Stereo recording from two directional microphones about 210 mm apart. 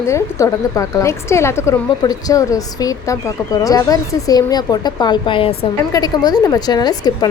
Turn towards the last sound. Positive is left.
turn(degrees=20)  # may be behind; listen again after turning